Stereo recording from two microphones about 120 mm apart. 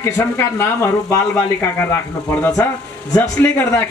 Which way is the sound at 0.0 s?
20° left (ahead or behind).